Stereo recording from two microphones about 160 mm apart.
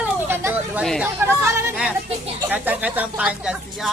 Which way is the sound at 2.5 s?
10° right (ahead or behind).